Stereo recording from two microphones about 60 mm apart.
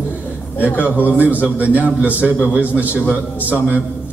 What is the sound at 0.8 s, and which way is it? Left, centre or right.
A man's voice, right.